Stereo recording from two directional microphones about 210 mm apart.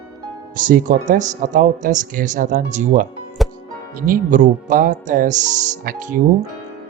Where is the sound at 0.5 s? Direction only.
40° right (ahead or behind).